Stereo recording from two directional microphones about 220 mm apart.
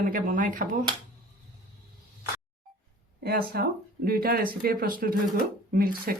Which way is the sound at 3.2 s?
45° right (ahead or behind).